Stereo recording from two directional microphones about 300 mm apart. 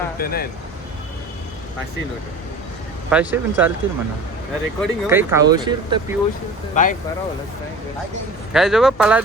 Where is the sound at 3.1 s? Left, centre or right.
Centre.